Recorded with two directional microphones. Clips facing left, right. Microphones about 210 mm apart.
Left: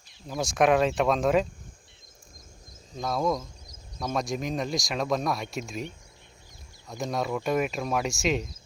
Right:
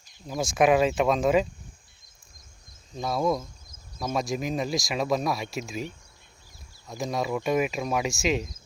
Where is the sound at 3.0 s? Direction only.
5° right (ahead or behind).